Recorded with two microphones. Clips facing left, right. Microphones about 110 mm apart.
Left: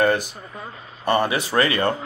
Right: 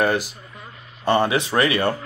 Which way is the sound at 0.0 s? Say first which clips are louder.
Left 1 dB; 5° right (ahead or behind).